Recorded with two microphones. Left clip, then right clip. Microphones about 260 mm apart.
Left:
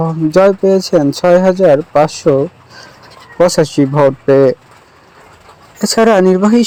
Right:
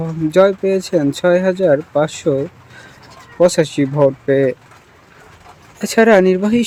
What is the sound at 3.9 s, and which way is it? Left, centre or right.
Speech, centre.